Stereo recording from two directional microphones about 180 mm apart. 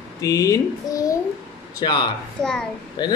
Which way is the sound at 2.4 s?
15° right (ahead or behind).